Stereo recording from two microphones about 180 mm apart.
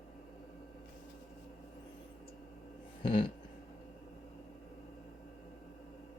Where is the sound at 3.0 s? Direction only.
25° left (ahead or behind).